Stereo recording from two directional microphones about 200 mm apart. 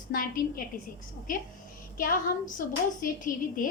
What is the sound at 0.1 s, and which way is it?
Speech, 45° left (ahead or behind).